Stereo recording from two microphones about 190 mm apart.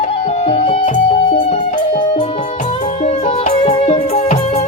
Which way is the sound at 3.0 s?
30° left (ahead or behind).